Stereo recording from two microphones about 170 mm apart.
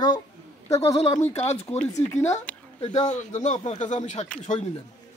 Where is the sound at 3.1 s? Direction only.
45° left (ahead or behind).